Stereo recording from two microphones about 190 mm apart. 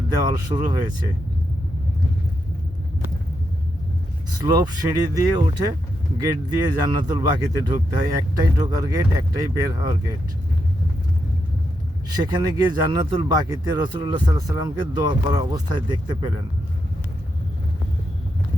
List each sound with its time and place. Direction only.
0.1 s speech: 20° right (ahead or behind)
4.4 s speech: 20° right (ahead or behind)
6.8 s speech: 20° right (ahead or behind)
12.1 s speech: 20° right (ahead or behind)